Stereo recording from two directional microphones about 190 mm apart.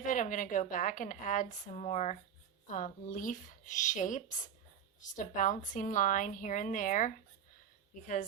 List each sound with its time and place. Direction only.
0.0 s a woman's voice: 45° left (ahead or behind)